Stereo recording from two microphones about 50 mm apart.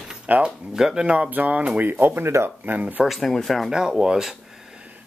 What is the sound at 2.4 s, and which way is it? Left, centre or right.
Speech, right.